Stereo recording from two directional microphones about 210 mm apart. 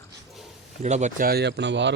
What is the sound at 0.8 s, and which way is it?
Speech, 35° right (ahead or behind).